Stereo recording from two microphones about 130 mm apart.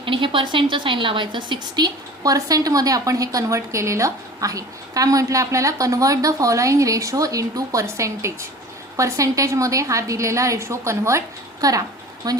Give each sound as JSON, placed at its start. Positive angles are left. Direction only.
{"t": 0.0, "sound": "a woman's voice", "side_deg": -40}